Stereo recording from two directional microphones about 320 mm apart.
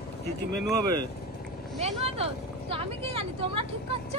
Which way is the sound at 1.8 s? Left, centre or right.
Centre.